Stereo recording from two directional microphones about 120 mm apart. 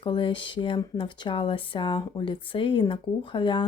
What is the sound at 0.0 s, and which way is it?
Speech, 45° left (ahead or behind).